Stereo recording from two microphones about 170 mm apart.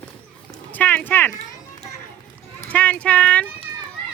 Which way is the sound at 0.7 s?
10° left (ahead or behind).